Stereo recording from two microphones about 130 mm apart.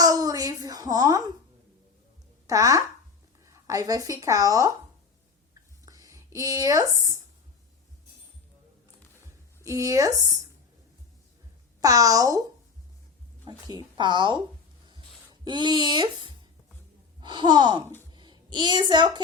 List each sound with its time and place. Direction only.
0.0 s a sound: 25° right (ahead or behind)
2.5 s speech: 25° right (ahead or behind)
5.8 s speech: 25° right (ahead or behind)
9.6 s speech: 25° right (ahead or behind)
11.8 s speech: 25° right (ahead or behind)
13.9 s sigh: 35° right (ahead or behind)
15.3 s speech: 35° right (ahead or behind)
17.2 s sigh: 35° right (ahead or behind)
18.1 s a woman's voice: 35° right (ahead or behind)